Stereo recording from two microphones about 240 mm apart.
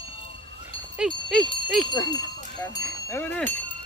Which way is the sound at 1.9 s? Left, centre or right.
Centre.